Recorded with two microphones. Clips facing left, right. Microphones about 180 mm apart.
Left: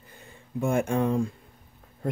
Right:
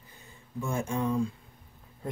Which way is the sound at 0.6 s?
60° left (ahead or behind).